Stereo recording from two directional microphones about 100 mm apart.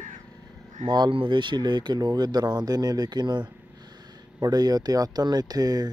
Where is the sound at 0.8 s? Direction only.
50° right (ahead or behind).